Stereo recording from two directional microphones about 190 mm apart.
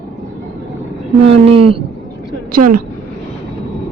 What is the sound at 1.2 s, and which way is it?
Speech, 30° right (ahead or behind).